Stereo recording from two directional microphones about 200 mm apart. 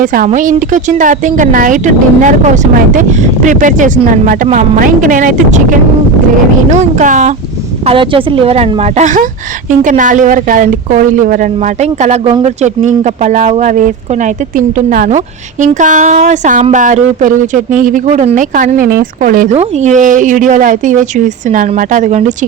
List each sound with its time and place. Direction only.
0.0 s a woman's voice: 45° right (ahead or behind)
6.7 s speech: 40° right (ahead or behind)
7.9 s speech: 25° right (ahead or behind)